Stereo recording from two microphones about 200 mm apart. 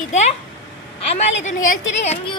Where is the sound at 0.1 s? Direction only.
35° left (ahead or behind).